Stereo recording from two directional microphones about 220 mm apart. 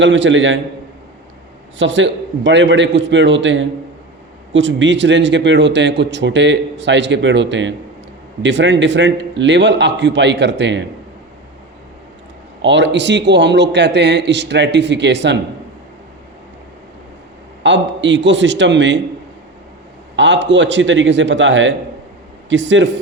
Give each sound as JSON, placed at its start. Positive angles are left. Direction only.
{"t": 0.0, "sound": "speech", "side_deg": -55}
{"t": 1.8, "sound": "a man's voice", "side_deg": -55}
{"t": 12.6, "sound": "a man's voice", "side_deg": -55}
{"t": 17.6, "sound": "speech", "side_deg": -55}
{"t": 20.1, "sound": "speech", "side_deg": -55}